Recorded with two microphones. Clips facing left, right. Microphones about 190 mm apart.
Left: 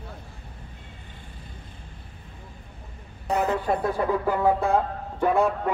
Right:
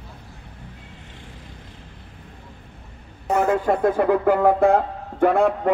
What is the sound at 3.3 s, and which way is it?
Speech, 50° right (ahead or behind).